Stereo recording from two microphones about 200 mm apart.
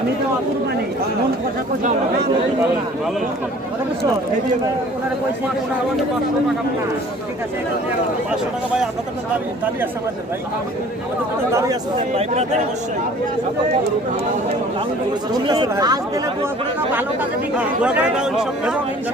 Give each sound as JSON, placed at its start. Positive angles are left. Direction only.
{"t": 12.1, "sound": "speech", "side_deg": -35}
{"t": 15.3, "sound": "speech", "side_deg": -20}
{"t": 17.8, "sound": "speech", "side_deg": -5}